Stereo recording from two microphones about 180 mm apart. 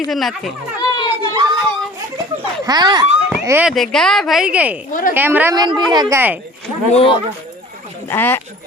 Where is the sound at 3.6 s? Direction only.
Centre (ahead or behind).